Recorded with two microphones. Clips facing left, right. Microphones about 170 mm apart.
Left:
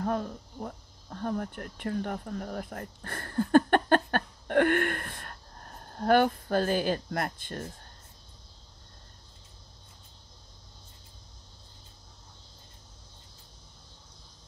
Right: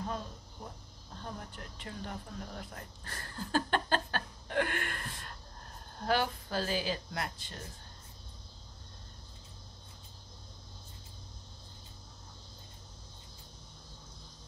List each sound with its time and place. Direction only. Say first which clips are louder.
0.0 s speech: left 8 dB; 60° left (ahead or behind)